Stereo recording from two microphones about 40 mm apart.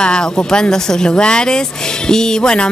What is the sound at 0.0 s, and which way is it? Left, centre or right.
Speech, left.